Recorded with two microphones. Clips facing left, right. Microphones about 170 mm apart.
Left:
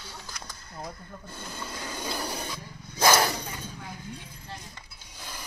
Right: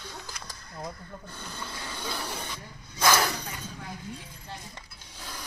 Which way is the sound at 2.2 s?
40° left (ahead or behind).